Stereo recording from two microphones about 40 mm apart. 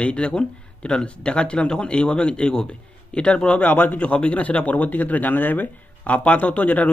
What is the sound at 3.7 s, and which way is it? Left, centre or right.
A man's voice, left.